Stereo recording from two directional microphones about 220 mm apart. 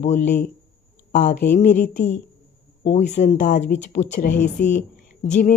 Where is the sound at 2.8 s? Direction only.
30° left (ahead or behind).